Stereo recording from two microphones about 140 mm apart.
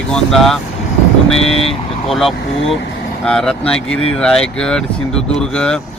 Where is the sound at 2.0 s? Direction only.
Centre (ahead or behind).